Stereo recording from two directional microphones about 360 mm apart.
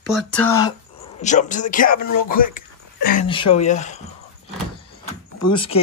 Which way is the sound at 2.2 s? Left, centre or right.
Left.